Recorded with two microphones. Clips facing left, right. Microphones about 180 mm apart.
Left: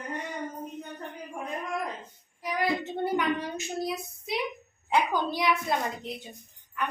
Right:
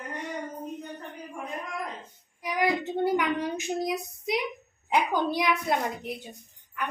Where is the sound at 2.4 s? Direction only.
15° right (ahead or behind).